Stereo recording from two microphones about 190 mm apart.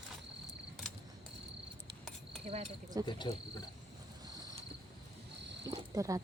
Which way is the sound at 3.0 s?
25° left (ahead or behind).